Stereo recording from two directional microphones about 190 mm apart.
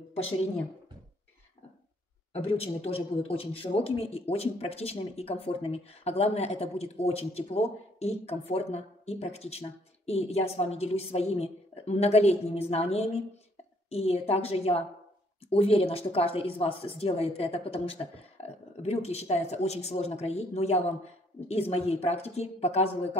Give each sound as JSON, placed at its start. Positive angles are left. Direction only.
{"t": 2.3, "sound": "a man's voice", "side_deg": 30}